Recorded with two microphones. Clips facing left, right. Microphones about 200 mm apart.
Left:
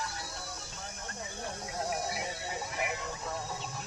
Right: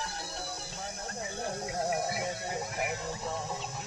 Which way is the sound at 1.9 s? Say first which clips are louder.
Right 2 dB; 55° right (ahead or behind).